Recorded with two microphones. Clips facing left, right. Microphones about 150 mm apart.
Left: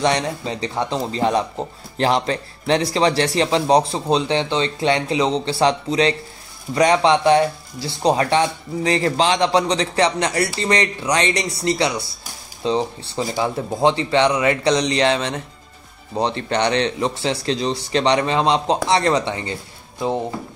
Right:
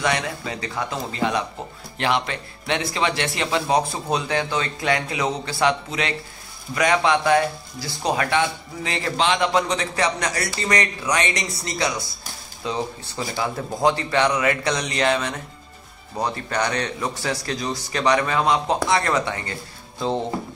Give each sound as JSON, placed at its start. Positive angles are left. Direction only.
{"t": 0.0, "sound": "speech", "side_deg": 35}